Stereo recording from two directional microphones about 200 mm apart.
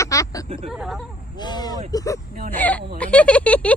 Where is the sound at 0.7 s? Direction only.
Centre (ahead or behind).